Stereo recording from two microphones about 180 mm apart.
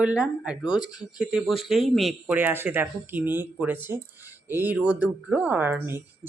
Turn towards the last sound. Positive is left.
turn(degrees=-10)  # may be behind; listen again after turning